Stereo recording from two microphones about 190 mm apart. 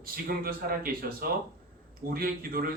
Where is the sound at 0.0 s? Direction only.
50° right (ahead or behind).